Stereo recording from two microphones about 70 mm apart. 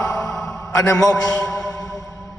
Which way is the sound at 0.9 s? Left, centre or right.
Centre.